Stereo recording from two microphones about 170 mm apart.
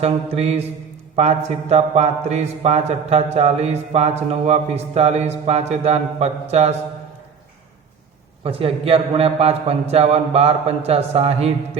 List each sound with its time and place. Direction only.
0.0 s speech: 40° right (ahead or behind)
8.4 s speech: 35° right (ahead or behind)